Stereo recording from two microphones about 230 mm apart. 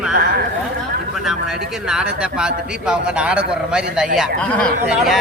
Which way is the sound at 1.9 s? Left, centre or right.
Centre.